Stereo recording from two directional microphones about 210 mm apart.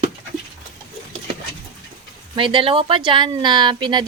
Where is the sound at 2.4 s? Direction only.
25° right (ahead or behind).